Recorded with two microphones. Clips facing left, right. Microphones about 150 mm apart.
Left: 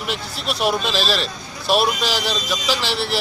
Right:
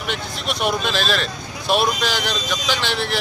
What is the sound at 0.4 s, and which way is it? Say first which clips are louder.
Speech: left 2 dB; 35° left (ahead or behind).